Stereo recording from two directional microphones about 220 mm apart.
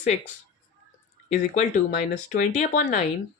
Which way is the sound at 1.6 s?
35° left (ahead or behind).